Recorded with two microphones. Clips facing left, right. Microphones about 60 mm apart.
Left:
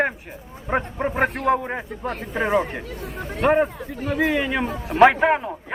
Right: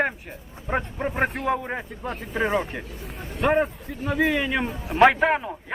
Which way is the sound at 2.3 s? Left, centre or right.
Centre.